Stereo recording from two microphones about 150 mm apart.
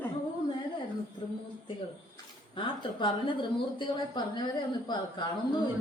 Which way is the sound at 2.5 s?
35° left (ahead or behind).